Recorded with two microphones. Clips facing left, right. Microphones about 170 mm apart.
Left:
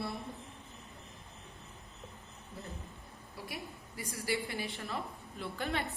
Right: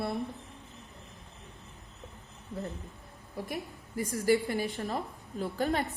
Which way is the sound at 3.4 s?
50° right (ahead or behind).